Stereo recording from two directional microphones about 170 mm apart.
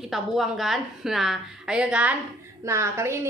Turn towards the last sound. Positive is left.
turn(degrees=-15)  # may be behind; listen again after turning